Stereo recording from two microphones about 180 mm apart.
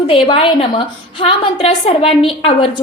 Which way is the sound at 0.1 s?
30° left (ahead or behind).